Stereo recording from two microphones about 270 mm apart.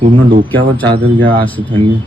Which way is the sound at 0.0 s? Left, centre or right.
Centre.